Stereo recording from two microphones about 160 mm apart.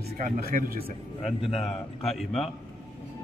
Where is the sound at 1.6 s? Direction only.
Centre (ahead or behind).